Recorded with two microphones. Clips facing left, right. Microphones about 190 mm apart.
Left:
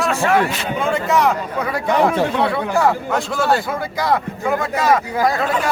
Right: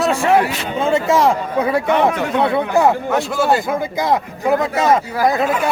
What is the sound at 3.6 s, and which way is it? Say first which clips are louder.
Speech: right 3 dB; 20° right (ahead or behind).